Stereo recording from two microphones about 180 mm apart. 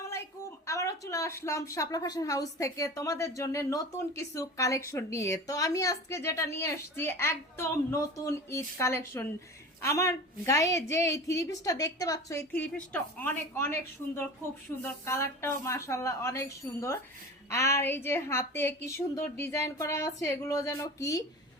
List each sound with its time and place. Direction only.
0.6 s speech: 15° left (ahead or behind)
14.8 s speech: 15° left (ahead or behind)